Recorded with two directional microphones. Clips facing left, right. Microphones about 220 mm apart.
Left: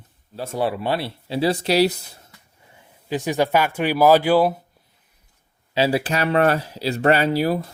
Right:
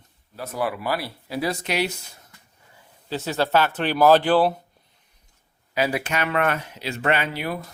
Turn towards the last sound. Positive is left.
turn(degrees=35)  # may be behind; listen again after turning